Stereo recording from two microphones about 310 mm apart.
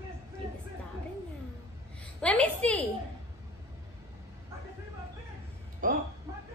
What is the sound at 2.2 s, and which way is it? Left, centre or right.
Speech, centre.